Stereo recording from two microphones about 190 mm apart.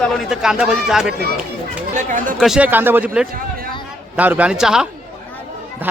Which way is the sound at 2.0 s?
45° right (ahead or behind).